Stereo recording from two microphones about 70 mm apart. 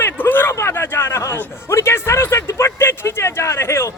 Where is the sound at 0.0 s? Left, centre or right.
Left.